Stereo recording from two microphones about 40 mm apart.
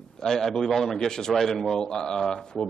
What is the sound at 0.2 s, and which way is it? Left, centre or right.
A man's voice, centre.